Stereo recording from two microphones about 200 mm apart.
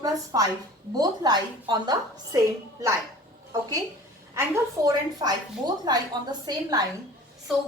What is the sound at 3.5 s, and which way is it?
A woman's voice, 20° right (ahead or behind).